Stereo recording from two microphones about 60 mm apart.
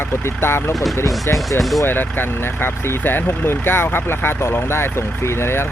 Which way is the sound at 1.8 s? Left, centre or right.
Left.